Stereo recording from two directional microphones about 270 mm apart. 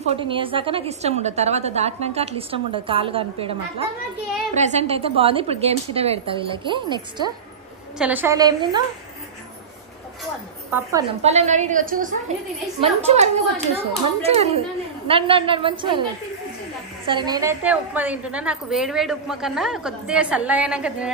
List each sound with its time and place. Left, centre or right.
0.0 s a woman's voice: centre
10.7 s a woman's voice: centre
11.2 s a woman's voice: right
17.1 s a woman's voice: centre